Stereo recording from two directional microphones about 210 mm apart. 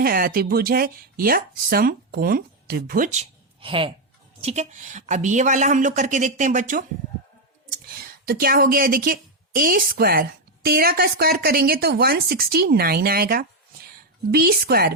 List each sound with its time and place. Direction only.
0.0 s a woman's voice: 45° right (ahead or behind)
7.9 s a woman's voice: 45° right (ahead or behind)